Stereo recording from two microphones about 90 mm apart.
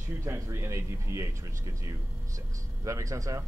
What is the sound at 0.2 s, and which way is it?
Speech, 30° right (ahead or behind).